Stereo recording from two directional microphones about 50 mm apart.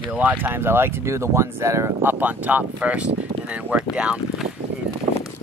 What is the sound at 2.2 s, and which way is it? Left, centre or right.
Speech, right.